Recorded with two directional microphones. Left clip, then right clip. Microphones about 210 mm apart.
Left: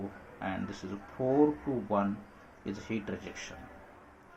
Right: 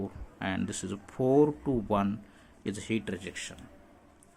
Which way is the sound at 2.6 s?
45° right (ahead or behind).